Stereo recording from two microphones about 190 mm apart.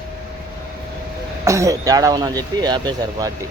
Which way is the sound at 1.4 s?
15° right (ahead or behind).